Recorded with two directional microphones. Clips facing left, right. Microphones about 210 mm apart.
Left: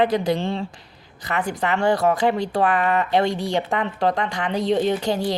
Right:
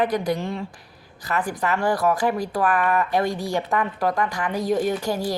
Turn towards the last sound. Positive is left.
turn(degrees=25)  # may be behind; listen again after turning